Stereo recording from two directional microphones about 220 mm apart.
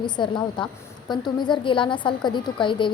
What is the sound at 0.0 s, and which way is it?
A woman's voice, 20° left (ahead or behind).